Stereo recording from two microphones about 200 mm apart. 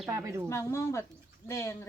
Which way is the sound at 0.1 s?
15° right (ahead or behind).